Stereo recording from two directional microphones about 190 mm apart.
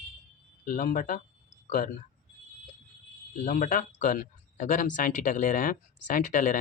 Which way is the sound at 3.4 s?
45° left (ahead or behind).